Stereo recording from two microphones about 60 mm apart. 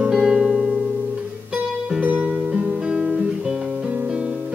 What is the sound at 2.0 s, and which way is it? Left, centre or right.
Music, right.